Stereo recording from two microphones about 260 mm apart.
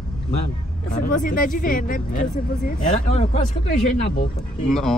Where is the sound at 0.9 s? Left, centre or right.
Left.